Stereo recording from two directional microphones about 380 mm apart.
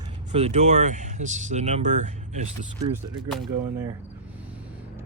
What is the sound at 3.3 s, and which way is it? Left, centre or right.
Speech, centre.